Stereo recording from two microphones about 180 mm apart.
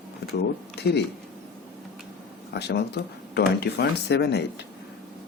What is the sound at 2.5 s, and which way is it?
Speech, 65° left (ahead or behind).